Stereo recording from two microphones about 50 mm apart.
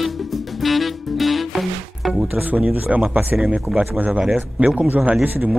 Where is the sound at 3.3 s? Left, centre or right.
Centre.